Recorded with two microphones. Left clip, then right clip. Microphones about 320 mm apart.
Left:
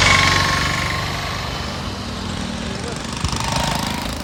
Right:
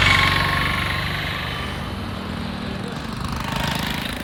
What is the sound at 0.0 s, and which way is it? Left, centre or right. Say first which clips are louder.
Jackhammer: left 2 dB; left.